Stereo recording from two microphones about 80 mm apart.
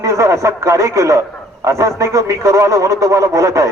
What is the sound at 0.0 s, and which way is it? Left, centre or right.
A man's voice, right.